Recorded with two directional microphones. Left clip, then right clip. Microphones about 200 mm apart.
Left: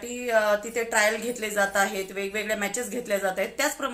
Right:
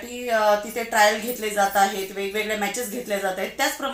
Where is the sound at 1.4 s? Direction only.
25° left (ahead or behind).